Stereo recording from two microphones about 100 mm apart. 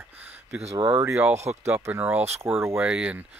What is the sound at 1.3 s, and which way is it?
Speech, 90° right.